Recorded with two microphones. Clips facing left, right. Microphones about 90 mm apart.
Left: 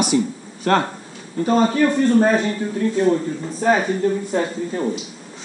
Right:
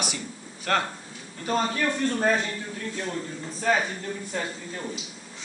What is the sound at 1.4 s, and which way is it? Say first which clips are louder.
Speech: left 9 dB; 30° left (ahead or behind).